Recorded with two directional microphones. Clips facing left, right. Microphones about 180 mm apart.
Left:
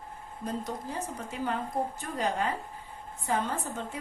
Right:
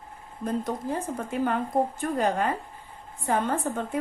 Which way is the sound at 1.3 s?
55° right (ahead or behind).